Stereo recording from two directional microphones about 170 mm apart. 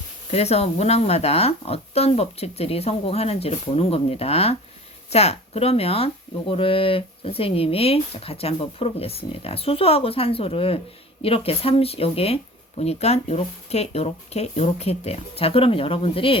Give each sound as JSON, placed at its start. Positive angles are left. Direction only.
{"t": 0.3, "sound": "speech", "side_deg": 40}